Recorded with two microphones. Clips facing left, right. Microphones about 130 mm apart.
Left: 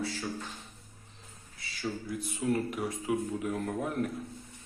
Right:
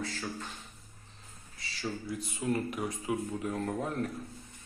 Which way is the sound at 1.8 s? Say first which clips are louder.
Left 1 dB; 5° right (ahead or behind).